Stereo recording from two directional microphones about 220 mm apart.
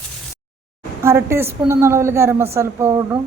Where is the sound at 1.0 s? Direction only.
10° right (ahead or behind).